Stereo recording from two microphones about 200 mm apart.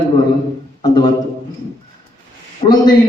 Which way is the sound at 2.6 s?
30° left (ahead or behind).